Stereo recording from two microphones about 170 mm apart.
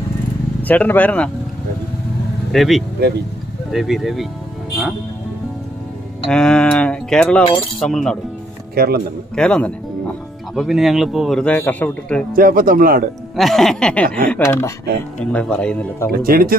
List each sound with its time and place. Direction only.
0.7 s speech: 10° left (ahead or behind)
2.5 s a man's voice: centre (ahead or behind)
3.0 s speech: 75° right (ahead or behind)
3.7 s a man's voice: centre (ahead or behind)
6.2 s a man's voice: 5° left (ahead or behind)
8.7 s a man's voice: 65° right (ahead or behind)
9.3 s a man's voice: 5° left (ahead or behind)
12.4 s speech: 55° right (ahead or behind)
13.4 s a man's voice: centre (ahead or behind)
14.0 s speech: 55° right (ahead or behind)
14.3 s speech: 15° left (ahead or behind)
15.3 s speech: 5° left (ahead or behind)
16.1 s speech: 60° right (ahead or behind)